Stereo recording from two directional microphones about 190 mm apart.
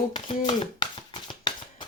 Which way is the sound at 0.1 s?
25° left (ahead or behind).